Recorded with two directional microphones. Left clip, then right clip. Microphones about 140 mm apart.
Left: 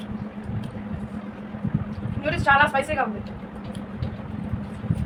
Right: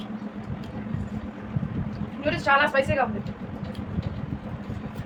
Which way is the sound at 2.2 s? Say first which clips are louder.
Left 2 dB; 15° left (ahead or behind).